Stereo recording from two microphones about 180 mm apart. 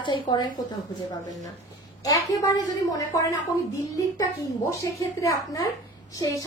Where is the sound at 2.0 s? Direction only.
20° left (ahead or behind).